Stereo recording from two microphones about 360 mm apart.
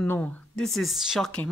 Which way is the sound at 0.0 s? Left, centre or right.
Centre.